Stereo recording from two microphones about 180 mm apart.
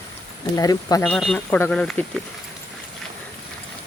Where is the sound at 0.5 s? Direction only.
20° left (ahead or behind).